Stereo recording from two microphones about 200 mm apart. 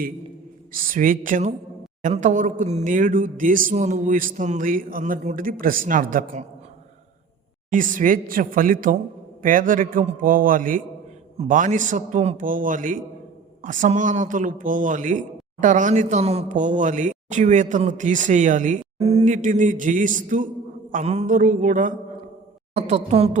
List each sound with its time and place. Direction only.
0.7 s a man's voice: 45° right (ahead or behind)
7.7 s a man's voice: 40° right (ahead or behind)